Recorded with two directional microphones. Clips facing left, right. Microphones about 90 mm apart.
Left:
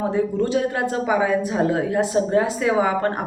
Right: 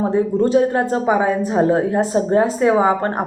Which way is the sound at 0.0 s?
35° right (ahead or behind).